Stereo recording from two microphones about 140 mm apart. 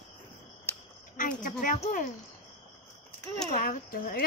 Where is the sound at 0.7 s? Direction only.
15° left (ahead or behind).